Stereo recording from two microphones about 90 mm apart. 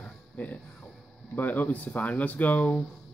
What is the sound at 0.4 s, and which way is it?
Speech, 15° left (ahead or behind).